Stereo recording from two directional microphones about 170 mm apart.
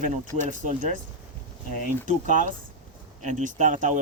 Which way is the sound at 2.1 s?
45° right (ahead or behind).